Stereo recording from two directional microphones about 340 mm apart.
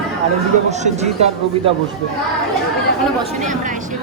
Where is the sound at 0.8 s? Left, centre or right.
Centre.